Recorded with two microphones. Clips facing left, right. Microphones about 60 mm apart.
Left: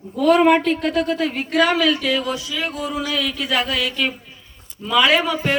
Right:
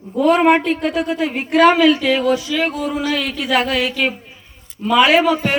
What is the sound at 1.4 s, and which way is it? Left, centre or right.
A man's voice, right.